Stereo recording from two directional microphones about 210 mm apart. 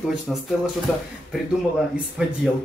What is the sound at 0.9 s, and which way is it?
Speech, 5° left (ahead or behind).